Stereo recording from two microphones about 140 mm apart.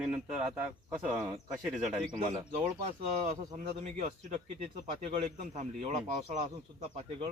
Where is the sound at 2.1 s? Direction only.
50° right (ahead or behind).